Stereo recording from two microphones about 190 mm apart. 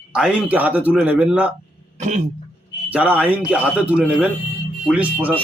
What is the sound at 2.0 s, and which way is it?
Speech, 40° right (ahead or behind).